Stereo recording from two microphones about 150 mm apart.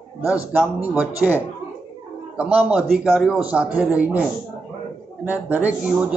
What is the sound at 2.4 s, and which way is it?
Speech, 10° right (ahead or behind).